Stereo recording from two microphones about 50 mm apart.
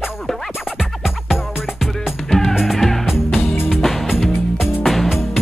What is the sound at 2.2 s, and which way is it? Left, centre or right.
Music, centre.